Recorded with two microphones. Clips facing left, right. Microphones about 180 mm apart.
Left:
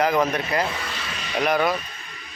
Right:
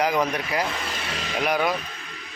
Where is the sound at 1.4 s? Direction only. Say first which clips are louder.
Left 2 dB; 10° right (ahead or behind).